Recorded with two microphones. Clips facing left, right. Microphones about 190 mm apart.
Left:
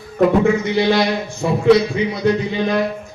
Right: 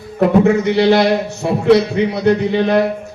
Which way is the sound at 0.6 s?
65° right (ahead or behind).